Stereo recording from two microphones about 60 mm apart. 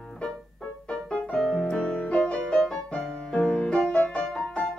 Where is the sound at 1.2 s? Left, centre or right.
Centre.